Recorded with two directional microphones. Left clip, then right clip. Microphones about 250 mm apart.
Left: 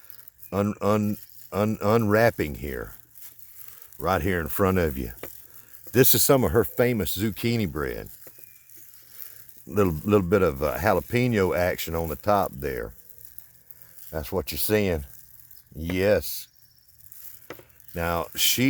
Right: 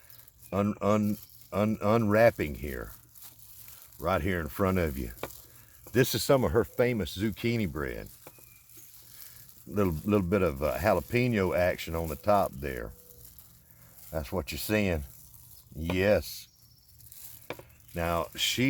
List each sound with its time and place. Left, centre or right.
0.5 s speech: left
4.0 s speech: left
9.7 s speech: left
14.1 s speech: left
17.9 s speech: left